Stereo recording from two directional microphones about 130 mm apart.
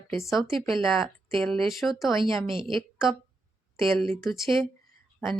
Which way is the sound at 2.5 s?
40° right (ahead or behind).